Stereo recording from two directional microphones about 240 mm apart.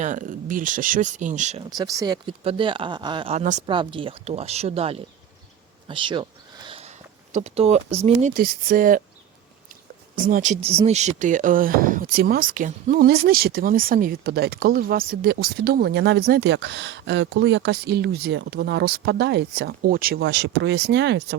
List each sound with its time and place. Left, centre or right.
0.0 s speech: right
1.7 s speech: centre
5.9 s a sound: right
7.3 s speech: right
10.2 s speech: right